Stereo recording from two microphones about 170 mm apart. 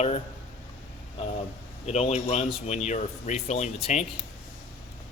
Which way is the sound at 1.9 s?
40° left (ahead or behind).